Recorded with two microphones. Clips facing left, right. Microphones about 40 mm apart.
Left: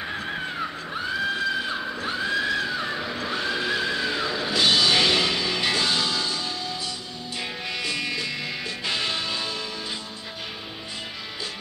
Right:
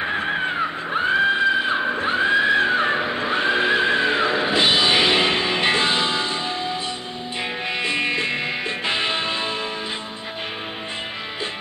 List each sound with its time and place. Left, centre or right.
0.0 s screaming: right
7.8 s music: right